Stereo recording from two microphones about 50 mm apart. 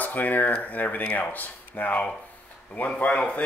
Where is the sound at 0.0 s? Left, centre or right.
Left.